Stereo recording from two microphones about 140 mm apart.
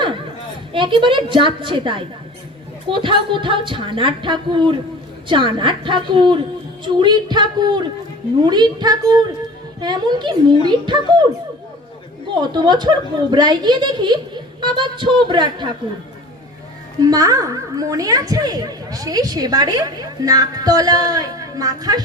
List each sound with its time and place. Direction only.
0.7 s a woman's voice: 35° right (ahead or behind)
12.3 s speech: 30° right (ahead or behind)
17.0 s a woman's voice: 25° right (ahead or behind)